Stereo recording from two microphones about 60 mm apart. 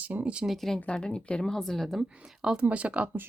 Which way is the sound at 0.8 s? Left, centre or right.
Centre.